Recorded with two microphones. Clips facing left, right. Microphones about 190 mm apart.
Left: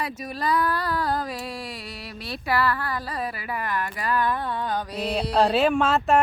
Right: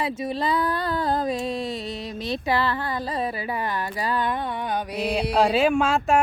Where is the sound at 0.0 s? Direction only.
25° right (ahead or behind).